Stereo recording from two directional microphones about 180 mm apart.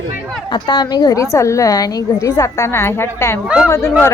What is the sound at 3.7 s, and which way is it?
Speech, 15° left (ahead or behind).